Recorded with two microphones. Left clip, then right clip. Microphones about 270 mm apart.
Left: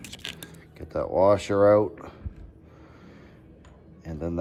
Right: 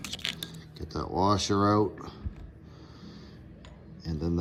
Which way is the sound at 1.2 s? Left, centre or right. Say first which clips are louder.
Left 6 dB; centre.